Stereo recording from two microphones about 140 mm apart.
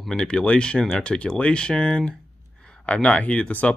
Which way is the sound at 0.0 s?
5° left (ahead or behind).